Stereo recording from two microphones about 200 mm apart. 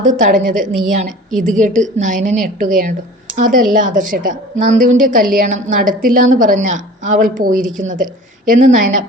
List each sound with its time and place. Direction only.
0.0 s a woman's voice: 40° right (ahead or behind)